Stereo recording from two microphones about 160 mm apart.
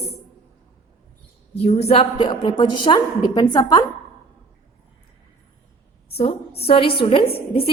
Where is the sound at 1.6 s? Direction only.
40° left (ahead or behind); by 3.8 s 25° left (ahead or behind).